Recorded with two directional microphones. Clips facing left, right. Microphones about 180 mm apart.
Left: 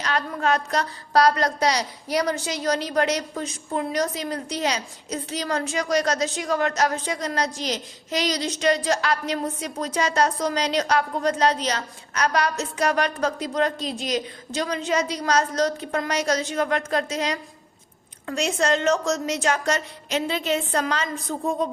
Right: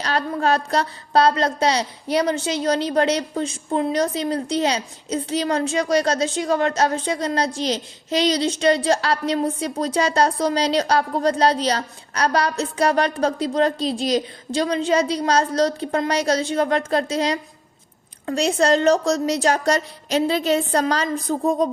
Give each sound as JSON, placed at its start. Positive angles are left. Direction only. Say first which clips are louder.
{"t": 0.0, "sound": "a woman's voice", "louder": "right 3 dB", "side_deg": -35}